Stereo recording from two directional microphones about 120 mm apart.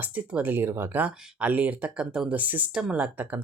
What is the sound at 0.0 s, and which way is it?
Speech, 10° right (ahead or behind).